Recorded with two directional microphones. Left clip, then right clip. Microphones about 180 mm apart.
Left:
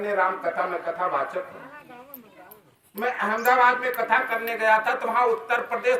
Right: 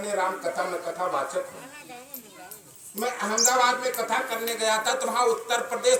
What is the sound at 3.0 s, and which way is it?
Speech, 10° right (ahead or behind).